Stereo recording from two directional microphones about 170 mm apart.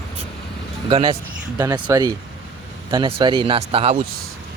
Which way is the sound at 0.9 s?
30° right (ahead or behind).